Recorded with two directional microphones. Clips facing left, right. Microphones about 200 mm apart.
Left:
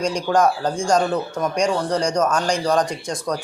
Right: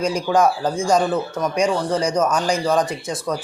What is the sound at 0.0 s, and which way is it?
Speech, 5° right (ahead or behind).